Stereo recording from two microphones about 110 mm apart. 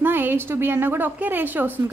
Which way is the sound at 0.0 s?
20° right (ahead or behind).